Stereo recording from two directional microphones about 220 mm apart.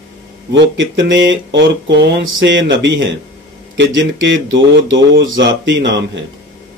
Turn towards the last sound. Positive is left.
turn(degrees=-55)  # may be behind; listen again after turning